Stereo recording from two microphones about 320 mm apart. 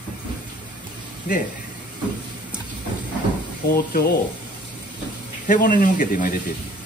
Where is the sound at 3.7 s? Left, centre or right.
Left.